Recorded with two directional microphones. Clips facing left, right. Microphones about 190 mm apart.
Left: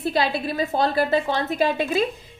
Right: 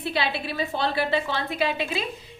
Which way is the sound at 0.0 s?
45° left (ahead or behind).